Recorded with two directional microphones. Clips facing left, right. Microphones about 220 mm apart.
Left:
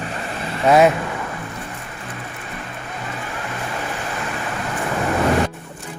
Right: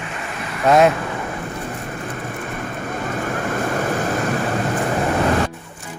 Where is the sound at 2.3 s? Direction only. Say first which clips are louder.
Right 6 dB; 50° right (ahead or behind).